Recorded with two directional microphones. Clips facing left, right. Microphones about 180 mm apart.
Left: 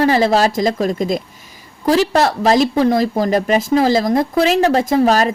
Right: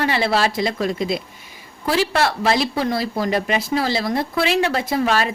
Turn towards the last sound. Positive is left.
turn(degrees=40)  # may be behind; listen again after turning